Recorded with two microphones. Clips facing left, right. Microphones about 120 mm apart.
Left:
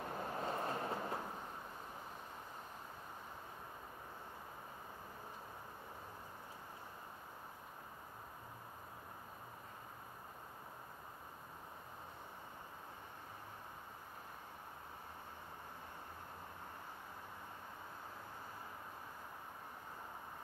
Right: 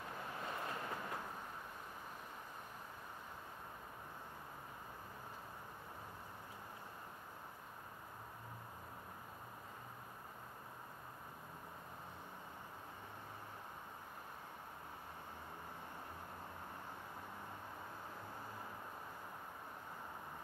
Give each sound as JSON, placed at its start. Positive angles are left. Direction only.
{"t": 0.0, "sound": "vehicle", "side_deg": 35}